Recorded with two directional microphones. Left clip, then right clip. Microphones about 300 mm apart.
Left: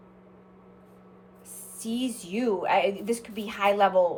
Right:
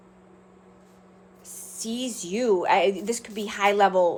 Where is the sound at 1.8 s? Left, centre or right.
Right.